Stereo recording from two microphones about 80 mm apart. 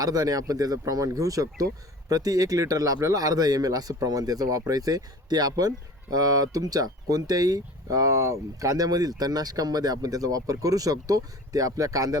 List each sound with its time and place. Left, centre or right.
0.0 s speech: right